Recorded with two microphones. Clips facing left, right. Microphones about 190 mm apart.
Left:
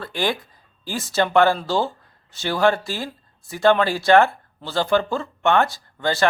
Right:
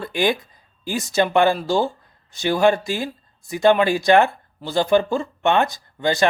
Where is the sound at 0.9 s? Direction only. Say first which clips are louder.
Right 2 dB; 15° right (ahead or behind).